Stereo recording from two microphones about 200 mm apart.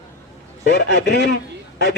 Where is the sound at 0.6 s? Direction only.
55° left (ahead or behind).